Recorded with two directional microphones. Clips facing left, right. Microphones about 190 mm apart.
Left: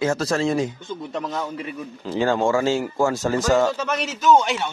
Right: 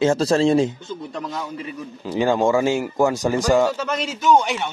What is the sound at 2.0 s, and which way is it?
Speech, 15° right (ahead or behind).